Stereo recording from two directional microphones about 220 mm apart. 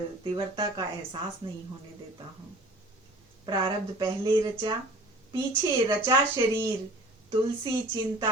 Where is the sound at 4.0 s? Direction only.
20° right (ahead or behind).